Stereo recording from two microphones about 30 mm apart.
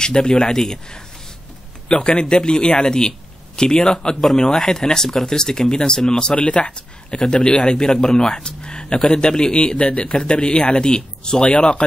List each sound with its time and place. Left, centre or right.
0.0 s speech: left
0.4 s speech: centre
1.9 s speech: left
6.3 s speech: left
7.7 s speech: centre